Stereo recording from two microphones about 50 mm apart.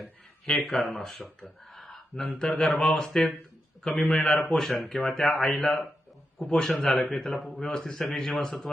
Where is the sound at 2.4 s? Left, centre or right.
Centre.